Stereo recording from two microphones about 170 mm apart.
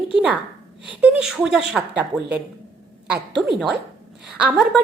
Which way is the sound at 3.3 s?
Centre (ahead or behind).